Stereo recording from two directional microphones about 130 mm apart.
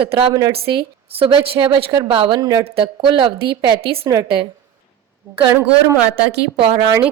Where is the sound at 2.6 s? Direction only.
45° right (ahead or behind).